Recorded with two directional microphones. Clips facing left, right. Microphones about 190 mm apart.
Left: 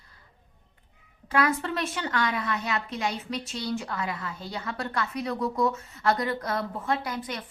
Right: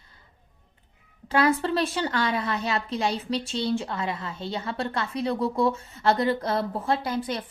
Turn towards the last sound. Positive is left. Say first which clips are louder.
# right 4 dB
turn(degrees=-30)  # may be behind; listen again after turning